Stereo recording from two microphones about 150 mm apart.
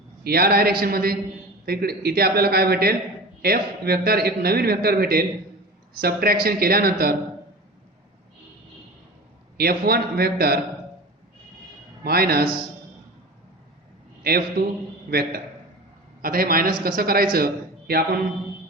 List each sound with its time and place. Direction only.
0.3 s a man's voice: 90° right
9.6 s a man's voice: 90° right
12.0 s a man's voice: 90° right
14.2 s a sound: 90° right
15.1 s a man's voice: 75° right (ahead or behind)